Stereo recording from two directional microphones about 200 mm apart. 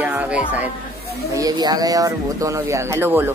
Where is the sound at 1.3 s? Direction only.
20° right (ahead or behind).